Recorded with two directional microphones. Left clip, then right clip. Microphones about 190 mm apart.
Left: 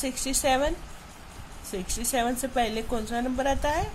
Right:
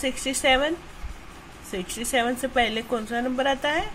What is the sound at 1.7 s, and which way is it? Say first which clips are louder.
A woman's voice: right 3 dB; 5° left (ahead or behind).